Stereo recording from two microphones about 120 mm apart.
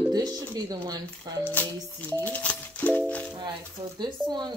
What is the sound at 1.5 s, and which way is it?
Speech, 15° left (ahead or behind).